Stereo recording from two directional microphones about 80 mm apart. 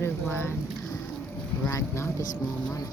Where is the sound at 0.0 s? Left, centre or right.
Left.